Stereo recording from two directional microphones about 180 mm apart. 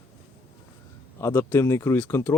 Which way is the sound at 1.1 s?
15° left (ahead or behind).